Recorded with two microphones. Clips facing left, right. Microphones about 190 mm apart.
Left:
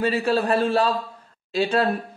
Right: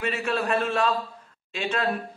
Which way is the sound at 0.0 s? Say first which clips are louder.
Left 6 dB; 35° left (ahead or behind).